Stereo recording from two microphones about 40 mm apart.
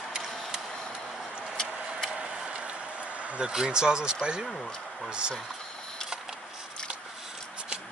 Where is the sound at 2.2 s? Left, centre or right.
Right.